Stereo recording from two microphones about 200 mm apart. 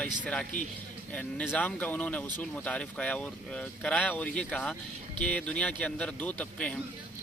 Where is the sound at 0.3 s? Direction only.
5° left (ahead or behind).